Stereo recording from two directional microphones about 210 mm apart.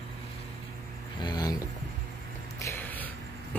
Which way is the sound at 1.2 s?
20° left (ahead or behind).